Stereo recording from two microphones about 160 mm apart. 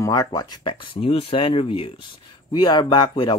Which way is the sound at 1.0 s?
35° left (ahead or behind).